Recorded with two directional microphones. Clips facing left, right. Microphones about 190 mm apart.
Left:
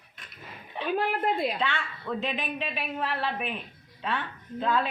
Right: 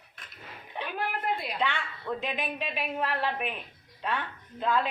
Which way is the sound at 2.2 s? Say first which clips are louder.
Left 2 dB; 10° right (ahead or behind).